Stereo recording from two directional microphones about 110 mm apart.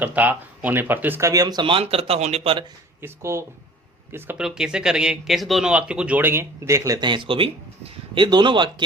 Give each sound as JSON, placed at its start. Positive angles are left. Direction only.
{"t": 0.0, "sound": "speech", "side_deg": -15}
{"t": 1.3, "sound": "speech", "side_deg": -35}
{"t": 1.7, "sound": "speech", "side_deg": -65}
{"t": 3.0, "sound": "speech", "side_deg": -25}
{"t": 4.4, "sound": "speech", "side_deg": -5}
{"t": 7.0, "sound": "speech", "side_deg": -45}